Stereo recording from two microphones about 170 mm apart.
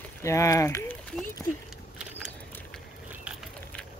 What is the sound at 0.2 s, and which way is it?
Speech, 15° left (ahead or behind).